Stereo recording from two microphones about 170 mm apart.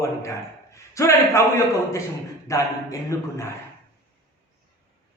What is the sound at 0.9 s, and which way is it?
Speech, 15° left (ahead or behind).